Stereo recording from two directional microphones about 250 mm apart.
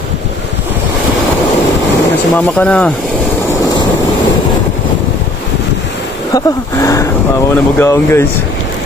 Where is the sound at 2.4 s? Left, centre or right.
Centre.